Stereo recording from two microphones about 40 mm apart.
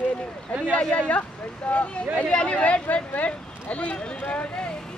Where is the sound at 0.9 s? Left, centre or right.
Left.